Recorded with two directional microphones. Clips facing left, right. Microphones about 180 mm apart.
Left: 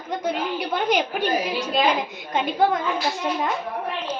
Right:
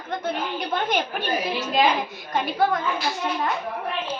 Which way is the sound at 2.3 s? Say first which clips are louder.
Left 2 dB; 20° left (ahead or behind).